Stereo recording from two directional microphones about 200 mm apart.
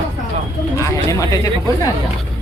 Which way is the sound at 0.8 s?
15° left (ahead or behind).